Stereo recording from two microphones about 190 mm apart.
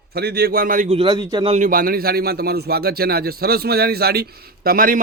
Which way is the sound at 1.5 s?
45° right (ahead or behind).